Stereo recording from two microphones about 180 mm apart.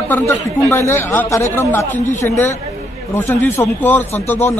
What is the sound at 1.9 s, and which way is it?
Speech, 45° left (ahead or behind).